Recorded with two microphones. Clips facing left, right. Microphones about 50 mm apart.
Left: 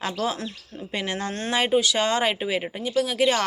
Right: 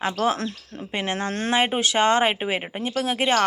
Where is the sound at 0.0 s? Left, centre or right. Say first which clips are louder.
Right 4 dB; right.